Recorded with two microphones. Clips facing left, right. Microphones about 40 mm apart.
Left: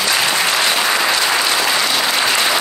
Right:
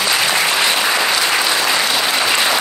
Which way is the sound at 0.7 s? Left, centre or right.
Centre.